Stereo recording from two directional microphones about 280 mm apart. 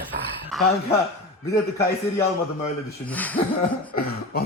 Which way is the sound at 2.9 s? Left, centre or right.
Centre.